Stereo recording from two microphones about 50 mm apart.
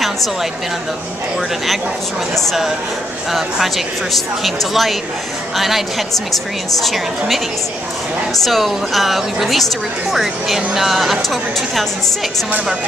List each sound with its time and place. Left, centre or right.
0.0 s a woman's voice: centre
2.3 s speech: centre
8.5 s speech: centre